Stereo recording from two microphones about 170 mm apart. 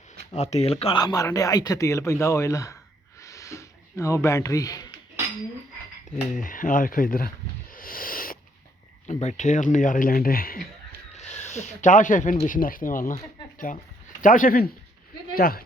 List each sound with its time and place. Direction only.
0.3 s speech: 40° left (ahead or behind)
0.9 s speech: 20° left (ahead or behind)
3.2 s a sound: 20° left (ahead or behind)
6.3 s speech: 50° left (ahead or behind)
7.7 s owl: 55° left (ahead or behind)
9.2 s speech: 45° left (ahead or behind)
11.3 s a man's voice: 45° left (ahead or behind); by 15.6 s 60° left (ahead or behind)